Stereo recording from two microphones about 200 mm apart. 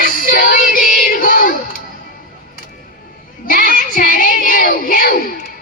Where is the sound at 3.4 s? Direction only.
45° left (ahead or behind).